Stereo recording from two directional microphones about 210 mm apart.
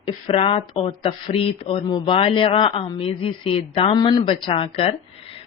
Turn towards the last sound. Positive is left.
turn(degrees=25)  # may be behind; listen again after turning